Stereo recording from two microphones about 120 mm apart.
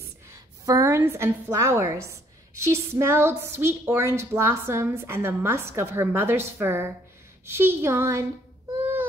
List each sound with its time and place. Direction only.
0.3 s a woman's voice: 25° right (ahead or behind)